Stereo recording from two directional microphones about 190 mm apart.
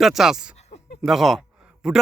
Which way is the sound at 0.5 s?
35° left (ahead or behind).